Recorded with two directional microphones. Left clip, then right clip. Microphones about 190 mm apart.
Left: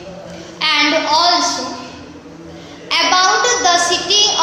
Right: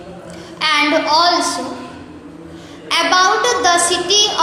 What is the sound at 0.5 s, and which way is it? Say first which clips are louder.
Speech: even; 30° right (ahead or behind).